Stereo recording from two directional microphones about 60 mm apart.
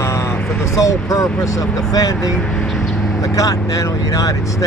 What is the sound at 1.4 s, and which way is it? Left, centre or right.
Speech, left.